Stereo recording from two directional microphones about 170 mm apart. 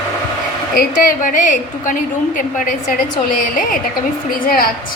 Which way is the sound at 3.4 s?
55° left (ahead or behind).